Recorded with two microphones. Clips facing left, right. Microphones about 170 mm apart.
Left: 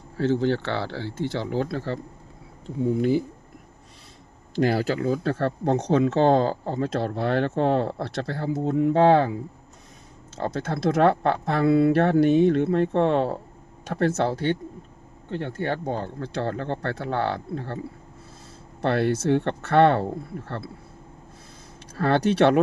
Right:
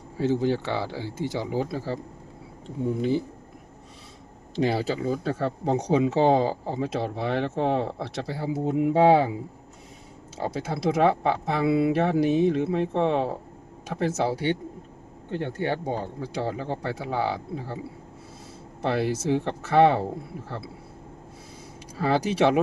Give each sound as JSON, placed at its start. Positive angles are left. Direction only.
{"t": 0.2, "sound": "speech", "side_deg": -10}
{"t": 4.8, "sound": "speech", "side_deg": 0}
{"t": 10.4, "sound": "speech", "side_deg": -5}
{"t": 18.8, "sound": "speech", "side_deg": 0}
{"t": 21.9, "sound": "speech", "side_deg": -5}